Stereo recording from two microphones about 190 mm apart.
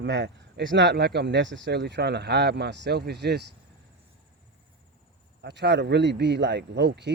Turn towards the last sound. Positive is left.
turn(degrees=-65)  # may be behind; listen again after turning